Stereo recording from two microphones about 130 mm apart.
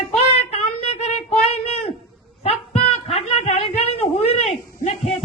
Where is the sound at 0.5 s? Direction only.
55° left (ahead or behind).